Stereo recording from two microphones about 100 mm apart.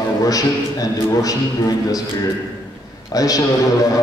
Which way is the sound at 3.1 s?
35° left (ahead or behind).